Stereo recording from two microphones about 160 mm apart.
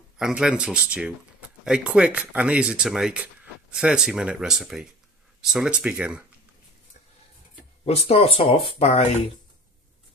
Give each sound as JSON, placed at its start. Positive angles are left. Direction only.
{"t": 0.2, "sound": "speech", "side_deg": -5}
{"t": 7.8, "sound": "speech", "side_deg": 40}